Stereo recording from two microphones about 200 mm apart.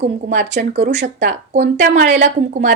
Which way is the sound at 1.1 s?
40° right (ahead or behind).